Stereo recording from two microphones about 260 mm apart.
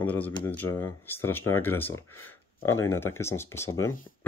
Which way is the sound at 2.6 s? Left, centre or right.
Left.